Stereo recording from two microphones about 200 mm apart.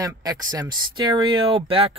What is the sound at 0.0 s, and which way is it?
Speech, 20° right (ahead or behind).